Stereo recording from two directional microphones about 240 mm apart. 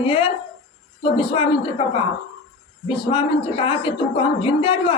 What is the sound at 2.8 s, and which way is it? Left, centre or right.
A woman's voice, left.